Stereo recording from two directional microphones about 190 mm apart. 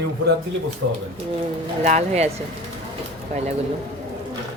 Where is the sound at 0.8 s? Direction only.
90° right.